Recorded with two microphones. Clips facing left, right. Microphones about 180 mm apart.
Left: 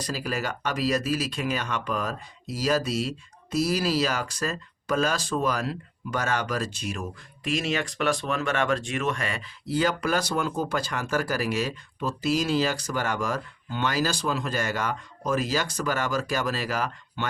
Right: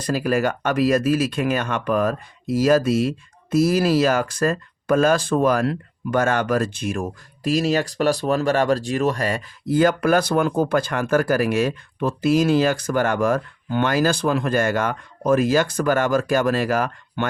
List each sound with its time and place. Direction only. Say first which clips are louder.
0.0 s speech: right 9 dB; 55° right (ahead or behind)